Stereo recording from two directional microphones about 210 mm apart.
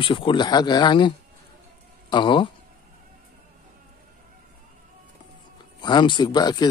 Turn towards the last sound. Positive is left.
turn(degrees=20)  # may be behind; listen again after turning